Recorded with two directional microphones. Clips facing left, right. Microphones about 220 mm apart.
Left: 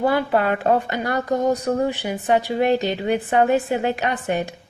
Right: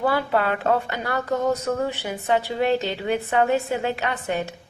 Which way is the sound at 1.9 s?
15° left (ahead or behind).